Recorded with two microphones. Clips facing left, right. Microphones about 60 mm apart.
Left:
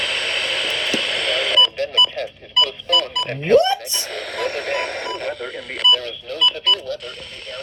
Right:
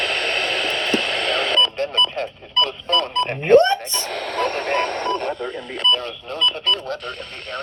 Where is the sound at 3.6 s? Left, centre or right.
Right.